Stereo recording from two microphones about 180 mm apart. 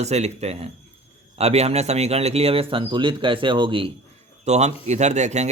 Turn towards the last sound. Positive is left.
turn(degrees=-40)  # may be behind; listen again after turning